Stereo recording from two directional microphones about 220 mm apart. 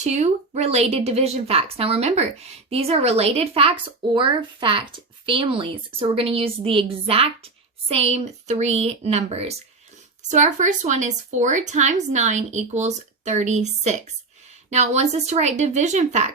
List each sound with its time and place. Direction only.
0.0 s a woman's voice: 30° right (ahead or behind)